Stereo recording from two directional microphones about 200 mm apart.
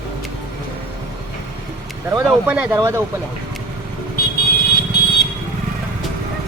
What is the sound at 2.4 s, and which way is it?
Speech, 10° right (ahead or behind).